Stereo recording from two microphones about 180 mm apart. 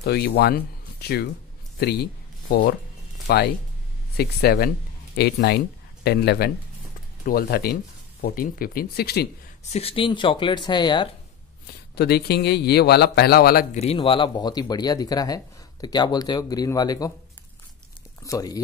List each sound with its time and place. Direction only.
0.0 s speech: 65° left (ahead or behind)
9.7 s speech: 35° left (ahead or behind)
11.6 s speech: 65° left (ahead or behind)
13.7 s speech: 35° left (ahead or behind)
18.2 s speech: 20° left (ahead or behind)